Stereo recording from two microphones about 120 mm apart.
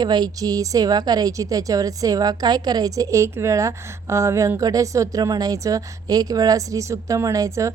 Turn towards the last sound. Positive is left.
turn(degrees=-25)  # may be behind; listen again after turning